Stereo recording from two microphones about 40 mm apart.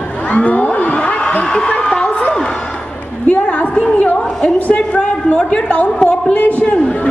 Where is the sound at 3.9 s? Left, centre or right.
Left.